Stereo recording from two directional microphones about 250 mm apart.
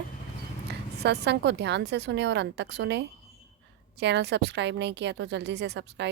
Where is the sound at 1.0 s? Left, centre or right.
Right.